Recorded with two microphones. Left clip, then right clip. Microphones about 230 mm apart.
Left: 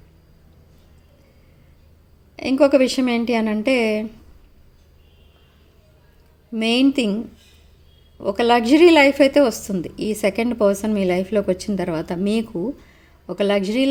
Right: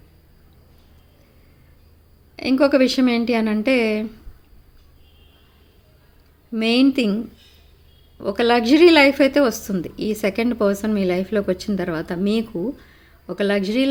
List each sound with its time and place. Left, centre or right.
2.3 s a woman's voice: centre
6.5 s a woman's voice: centre
8.2 s a woman's voice: centre